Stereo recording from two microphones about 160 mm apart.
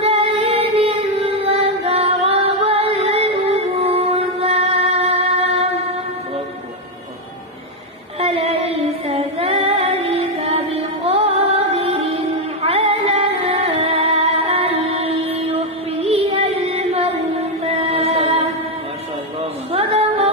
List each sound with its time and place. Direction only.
0.0 s female singing: 40° right (ahead or behind)
8.2 s female singing: 40° right (ahead or behind)
11.1 s music: 40° right (ahead or behind)
19.7 s music: 40° right (ahead or behind)